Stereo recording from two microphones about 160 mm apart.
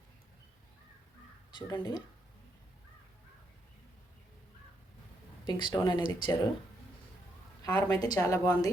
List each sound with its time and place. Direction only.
1.5 s speech: 25° left (ahead or behind)
5.5 s speech: 30° left (ahead or behind)
7.6 s a woman's voice: 25° left (ahead or behind)